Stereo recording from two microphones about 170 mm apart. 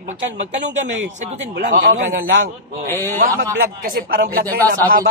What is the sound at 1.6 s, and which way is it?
Speech, 50° right (ahead or behind).